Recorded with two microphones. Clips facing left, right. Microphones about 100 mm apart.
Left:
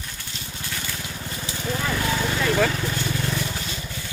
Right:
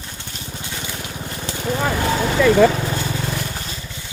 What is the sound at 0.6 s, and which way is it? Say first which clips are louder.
Gush: right 1 dB; 20° right (ahead or behind).